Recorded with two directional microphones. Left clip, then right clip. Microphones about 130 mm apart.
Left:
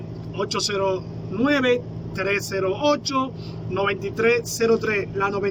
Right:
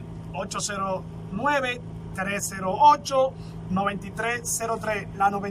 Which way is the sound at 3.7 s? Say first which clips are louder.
Left 4 dB; 15° left (ahead or behind).